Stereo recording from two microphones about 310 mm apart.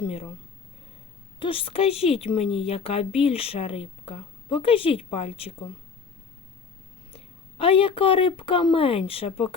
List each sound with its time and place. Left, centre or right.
0.0 s a woman's voice: centre
1.4 s a woman's voice: centre
7.6 s speech: centre